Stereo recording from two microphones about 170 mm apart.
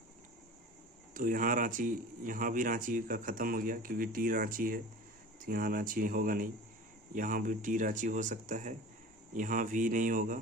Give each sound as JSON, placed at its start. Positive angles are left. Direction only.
{"t": 1.1, "sound": "speech", "side_deg": -50}